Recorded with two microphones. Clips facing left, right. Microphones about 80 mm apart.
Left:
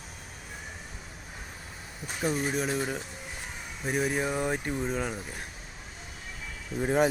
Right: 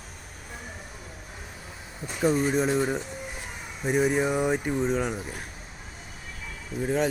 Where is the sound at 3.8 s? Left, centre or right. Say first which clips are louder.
Right 5 dB; centre.